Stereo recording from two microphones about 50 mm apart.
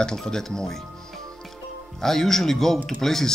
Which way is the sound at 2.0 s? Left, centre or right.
Centre.